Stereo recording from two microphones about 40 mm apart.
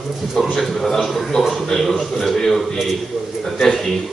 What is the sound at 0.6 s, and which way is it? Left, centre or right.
Speech, centre.